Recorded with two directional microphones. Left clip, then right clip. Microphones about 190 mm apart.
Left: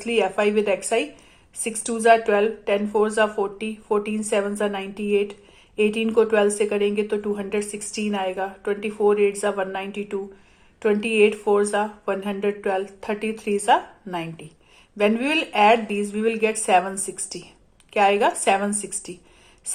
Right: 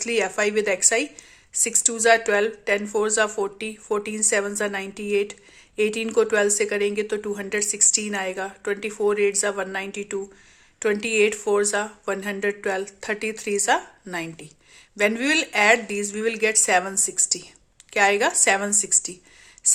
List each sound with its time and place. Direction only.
0.0 s speech: 35° right (ahead or behind)